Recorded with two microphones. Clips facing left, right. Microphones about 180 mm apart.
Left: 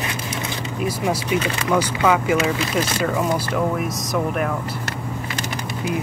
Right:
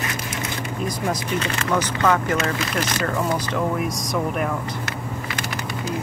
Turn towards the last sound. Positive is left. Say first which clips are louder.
# left 1 dB
turn(degrees=0)  # may be behind; listen again after turning